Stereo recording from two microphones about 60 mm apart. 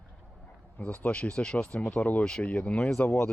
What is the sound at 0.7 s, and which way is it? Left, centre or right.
Speech, left.